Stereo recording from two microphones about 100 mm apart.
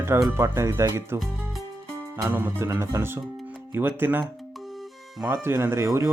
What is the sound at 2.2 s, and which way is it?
Speech, 20° right (ahead or behind).